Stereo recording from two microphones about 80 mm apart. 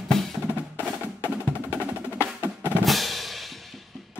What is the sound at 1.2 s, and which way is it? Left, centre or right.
Percussion, left.